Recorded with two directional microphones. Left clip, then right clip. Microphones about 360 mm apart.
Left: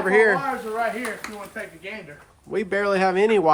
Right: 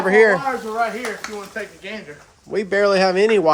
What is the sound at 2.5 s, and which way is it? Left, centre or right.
Speech, centre.